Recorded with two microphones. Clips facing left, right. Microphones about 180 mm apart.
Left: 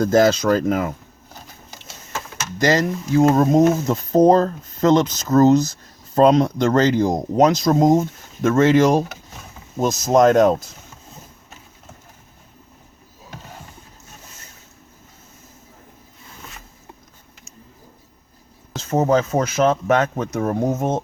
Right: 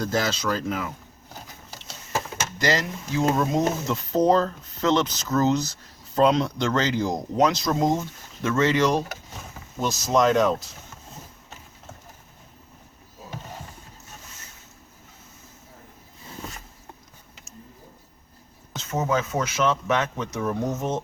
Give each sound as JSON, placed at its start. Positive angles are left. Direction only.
{"t": 0.0, "sound": "speech", "side_deg": 45}
{"t": 2.6, "sound": "speech", "side_deg": 45}
{"t": 18.8, "sound": "speech", "side_deg": 40}